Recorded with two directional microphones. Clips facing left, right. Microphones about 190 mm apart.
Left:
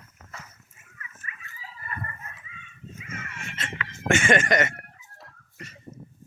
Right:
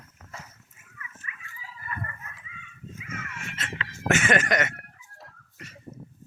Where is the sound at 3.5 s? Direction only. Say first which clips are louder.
Left 2 dB; centre (ahead or behind).